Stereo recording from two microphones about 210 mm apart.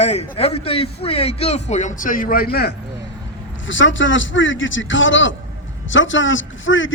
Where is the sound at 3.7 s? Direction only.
65° left (ahead or behind).